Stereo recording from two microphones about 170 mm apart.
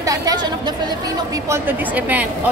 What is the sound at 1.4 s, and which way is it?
Speech, 15° right (ahead or behind).